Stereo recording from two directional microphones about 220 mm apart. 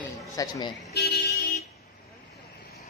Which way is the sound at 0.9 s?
45° left (ahead or behind).